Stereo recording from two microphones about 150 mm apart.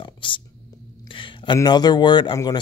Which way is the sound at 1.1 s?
35° left (ahead or behind).